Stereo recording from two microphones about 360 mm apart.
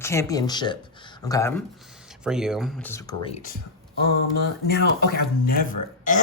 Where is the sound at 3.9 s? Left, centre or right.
Left.